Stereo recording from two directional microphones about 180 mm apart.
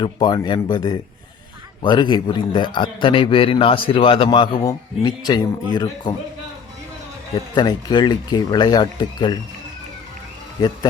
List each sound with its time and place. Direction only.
0.0 s a man's voice: 25° left (ahead or behind)
7.3 s a man's voice: 25° left (ahead or behind)